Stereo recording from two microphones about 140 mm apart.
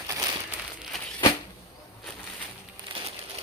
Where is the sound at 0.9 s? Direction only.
Centre (ahead or behind).